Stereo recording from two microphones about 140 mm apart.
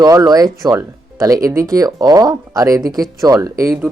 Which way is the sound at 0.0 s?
25° right (ahead or behind).